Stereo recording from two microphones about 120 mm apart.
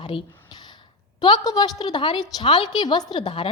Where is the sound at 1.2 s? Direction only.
35° left (ahead or behind).